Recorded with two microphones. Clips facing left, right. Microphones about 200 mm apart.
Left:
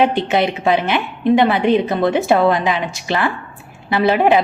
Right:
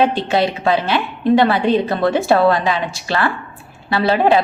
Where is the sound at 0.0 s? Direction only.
20° left (ahead or behind).